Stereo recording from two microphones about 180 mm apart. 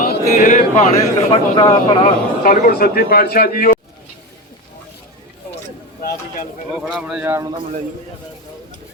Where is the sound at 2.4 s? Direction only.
50° left (ahead or behind).